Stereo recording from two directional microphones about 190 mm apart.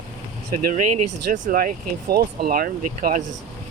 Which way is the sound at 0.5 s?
40° right (ahead or behind).